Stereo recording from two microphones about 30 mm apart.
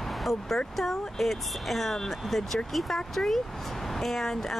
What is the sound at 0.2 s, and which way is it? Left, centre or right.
Speech, centre.